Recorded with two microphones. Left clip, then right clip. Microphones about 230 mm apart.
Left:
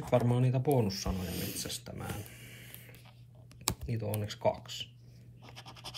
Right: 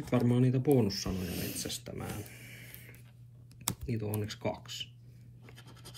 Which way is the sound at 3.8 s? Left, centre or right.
Centre.